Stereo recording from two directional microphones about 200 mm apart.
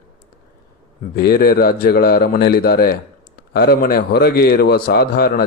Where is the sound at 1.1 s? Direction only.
50° left (ahead or behind).